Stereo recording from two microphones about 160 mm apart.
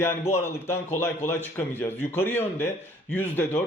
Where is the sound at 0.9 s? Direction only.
15° left (ahead or behind).